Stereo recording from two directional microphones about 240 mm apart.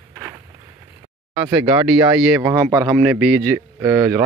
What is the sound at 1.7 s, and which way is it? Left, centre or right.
Speech, centre.